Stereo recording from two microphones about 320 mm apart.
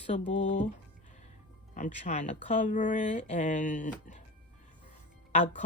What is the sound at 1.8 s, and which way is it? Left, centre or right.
Speech, left.